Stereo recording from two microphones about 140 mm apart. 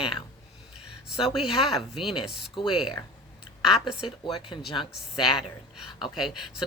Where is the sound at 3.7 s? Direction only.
5° right (ahead or behind).